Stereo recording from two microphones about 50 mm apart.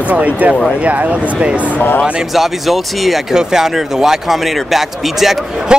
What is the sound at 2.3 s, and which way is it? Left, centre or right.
A man's voice, centre.